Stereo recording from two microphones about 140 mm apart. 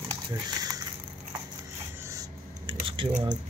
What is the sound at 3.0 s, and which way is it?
Speech, 35° right (ahead or behind).